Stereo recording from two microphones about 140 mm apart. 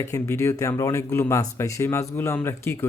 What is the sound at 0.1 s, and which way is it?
Speech, 20° left (ahead or behind).